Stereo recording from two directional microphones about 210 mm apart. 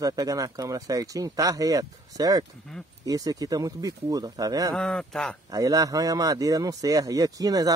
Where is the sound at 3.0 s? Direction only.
15° right (ahead or behind).